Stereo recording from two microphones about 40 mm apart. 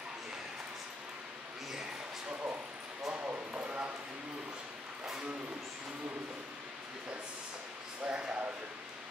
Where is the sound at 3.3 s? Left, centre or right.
Right.